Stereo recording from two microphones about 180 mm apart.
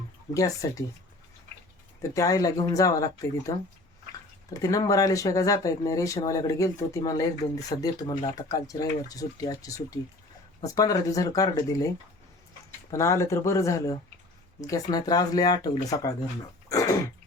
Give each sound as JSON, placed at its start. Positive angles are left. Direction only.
{"t": 0.3, "sound": "speech", "side_deg": 20}
{"t": 2.0, "sound": "speech", "side_deg": 20}
{"t": 4.5, "sound": "speech", "side_deg": 20}
{"t": 16.6, "sound": "throat clearing", "side_deg": 15}